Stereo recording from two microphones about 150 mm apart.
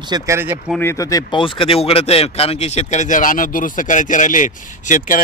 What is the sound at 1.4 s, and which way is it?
Speech, 35° left (ahead or behind).